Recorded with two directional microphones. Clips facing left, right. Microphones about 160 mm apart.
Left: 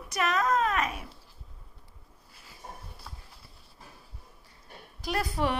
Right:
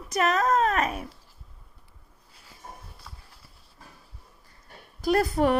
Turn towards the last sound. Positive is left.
turn(degrees=-45)  # may be behind; listen again after turning